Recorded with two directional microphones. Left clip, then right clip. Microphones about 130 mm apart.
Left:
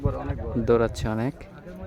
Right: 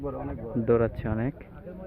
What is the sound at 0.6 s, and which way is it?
Speech, 35° left (ahead or behind).